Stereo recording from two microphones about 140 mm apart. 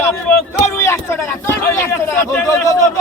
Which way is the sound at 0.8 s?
20° left (ahead or behind).